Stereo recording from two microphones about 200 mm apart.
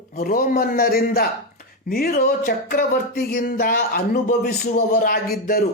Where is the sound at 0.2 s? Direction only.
45° left (ahead or behind).